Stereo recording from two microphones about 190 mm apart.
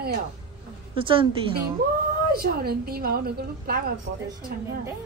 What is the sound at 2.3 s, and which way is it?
A woman's voice, 50° right (ahead or behind).